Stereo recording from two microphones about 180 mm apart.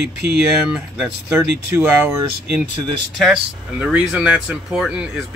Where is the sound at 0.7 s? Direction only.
5° right (ahead or behind).